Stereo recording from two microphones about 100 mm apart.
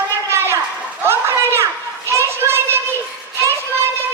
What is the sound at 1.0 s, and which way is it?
Children playing, 25° right (ahead or behind).